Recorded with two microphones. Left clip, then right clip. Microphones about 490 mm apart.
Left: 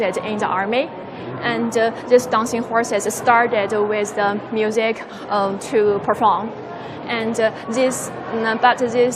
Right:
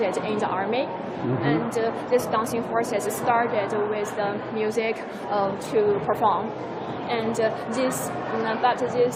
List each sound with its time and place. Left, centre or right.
0.0 s a woman's voice: left
1.5 s a woman's voice: left
2.0 s a woman's voice: left
3.2 s a woman's voice: left
4.6 s a woman's voice: left
8.4 s a woman's voice: left